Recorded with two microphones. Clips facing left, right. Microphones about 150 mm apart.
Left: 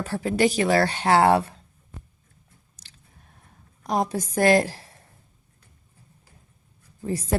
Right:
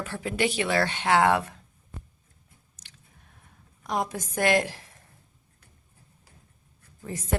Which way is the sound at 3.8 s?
35° left (ahead or behind).